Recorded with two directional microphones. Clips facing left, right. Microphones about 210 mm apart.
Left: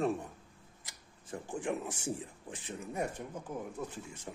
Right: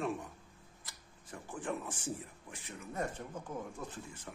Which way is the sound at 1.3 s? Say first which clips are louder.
Left 4 dB; 30° left (ahead or behind).